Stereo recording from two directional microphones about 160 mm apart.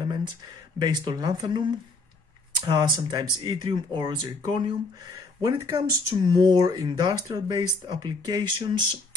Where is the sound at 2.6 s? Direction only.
25° right (ahead or behind).